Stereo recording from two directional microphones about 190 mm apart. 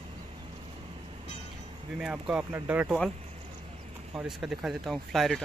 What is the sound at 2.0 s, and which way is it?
Speech, 5° right (ahead or behind).